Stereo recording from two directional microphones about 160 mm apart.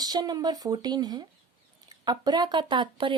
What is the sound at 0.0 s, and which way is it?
Speech, 25° right (ahead or behind).